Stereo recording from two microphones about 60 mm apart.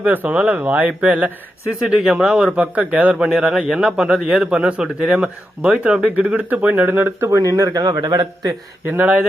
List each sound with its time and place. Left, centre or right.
0.0 s speech: right
1.8 s a man's voice: centre
2.6 s speech: right
3.2 s a man's voice: centre; by 7.3 s right
7.3 s a man's voice: right
8.8 s speech: right